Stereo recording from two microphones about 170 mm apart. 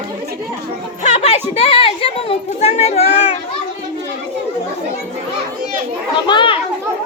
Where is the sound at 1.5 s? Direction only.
35° left (ahead or behind).